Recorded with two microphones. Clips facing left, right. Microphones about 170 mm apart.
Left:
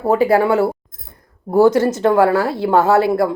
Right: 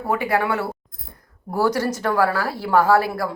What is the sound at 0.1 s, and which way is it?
Speech, 25° left (ahead or behind).